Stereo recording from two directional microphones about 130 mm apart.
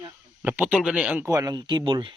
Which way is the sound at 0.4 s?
15° right (ahead or behind).